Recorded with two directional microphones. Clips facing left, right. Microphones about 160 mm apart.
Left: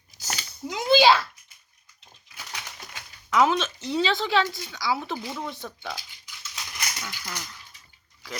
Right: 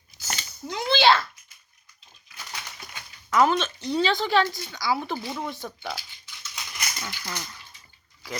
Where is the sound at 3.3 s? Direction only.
Centre (ahead or behind).